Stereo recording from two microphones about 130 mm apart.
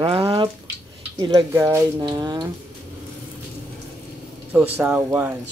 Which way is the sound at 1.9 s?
35° right (ahead or behind).